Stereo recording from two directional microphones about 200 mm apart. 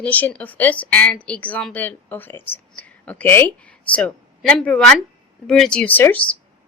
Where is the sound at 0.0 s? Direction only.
10° left (ahead or behind).